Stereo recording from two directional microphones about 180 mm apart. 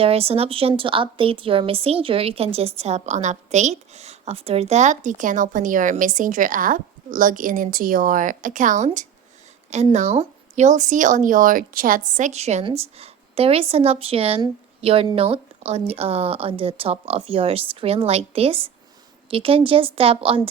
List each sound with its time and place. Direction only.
0.0 s a woman's voice: 35° right (ahead or behind)